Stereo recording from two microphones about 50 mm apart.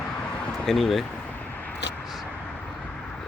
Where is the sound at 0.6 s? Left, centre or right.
Centre.